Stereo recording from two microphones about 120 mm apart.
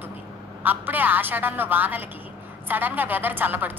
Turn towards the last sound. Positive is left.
turn(degrees=-15)  # may be behind; listen again after turning